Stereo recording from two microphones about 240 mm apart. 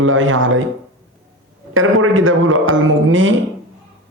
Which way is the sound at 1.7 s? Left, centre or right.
Right.